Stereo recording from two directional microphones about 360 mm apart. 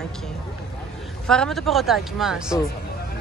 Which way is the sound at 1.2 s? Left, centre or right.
Centre.